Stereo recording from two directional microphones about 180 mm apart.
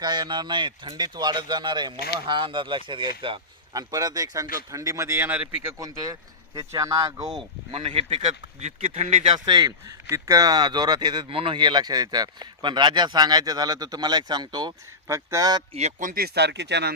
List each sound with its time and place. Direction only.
0.0 s speech: 25° right (ahead or behind)
7.7 s speech: 30° right (ahead or behind)
15.7 s speech: 40° right (ahead or behind); by 16.9 s 70° right (ahead or behind)